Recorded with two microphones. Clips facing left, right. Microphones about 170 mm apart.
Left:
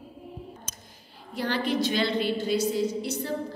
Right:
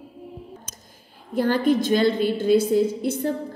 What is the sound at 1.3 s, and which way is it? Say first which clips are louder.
A woman's voice: right 7 dB; 45° right (ahead or behind).